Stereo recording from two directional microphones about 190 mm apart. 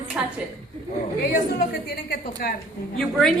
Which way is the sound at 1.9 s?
50° left (ahead or behind).